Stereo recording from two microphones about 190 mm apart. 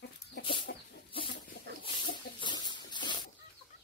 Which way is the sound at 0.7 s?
60° left (ahead or behind).